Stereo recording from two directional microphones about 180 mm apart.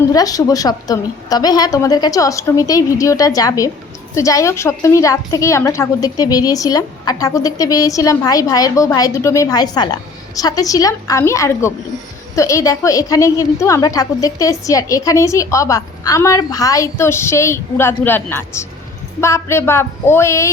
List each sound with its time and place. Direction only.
0.1 s a woman's voice: 20° left (ahead or behind)